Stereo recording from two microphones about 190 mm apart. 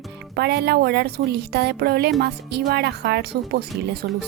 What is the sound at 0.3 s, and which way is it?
A woman's voice, 60° right (ahead or behind).